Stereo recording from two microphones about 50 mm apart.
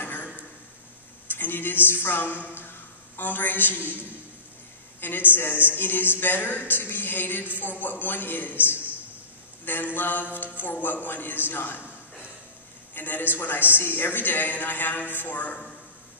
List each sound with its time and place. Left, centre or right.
0.0 s a sound: left
1.3 s a woman's voice: left
5.0 s a man's voice: left
9.9 s a man's voice: left